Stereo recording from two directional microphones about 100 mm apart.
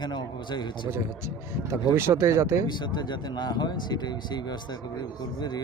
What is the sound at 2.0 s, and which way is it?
Speech, 25° right (ahead or behind).